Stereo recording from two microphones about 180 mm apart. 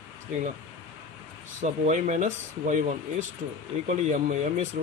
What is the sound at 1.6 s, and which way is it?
Speech, 40° right (ahead or behind).